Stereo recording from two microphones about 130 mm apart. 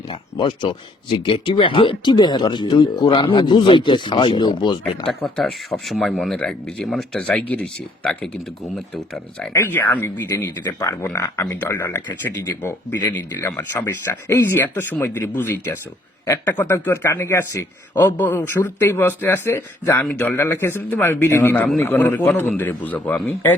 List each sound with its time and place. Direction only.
0.1 s speech: 35° left (ahead or behind)
5.0 s speech: 5° left (ahead or behind)
9.5 s a man's voice: 20° left (ahead or behind)